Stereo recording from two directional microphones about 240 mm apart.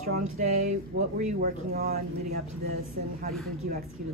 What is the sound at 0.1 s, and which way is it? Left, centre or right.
Speech, right.